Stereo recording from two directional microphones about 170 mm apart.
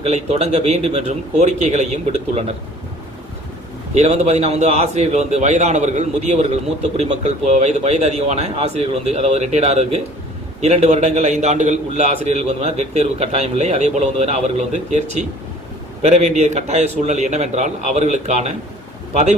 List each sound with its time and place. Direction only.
0.0 s a man's voice: 40° right (ahead or behind)
3.9 s a man's voice: 40° right (ahead or behind)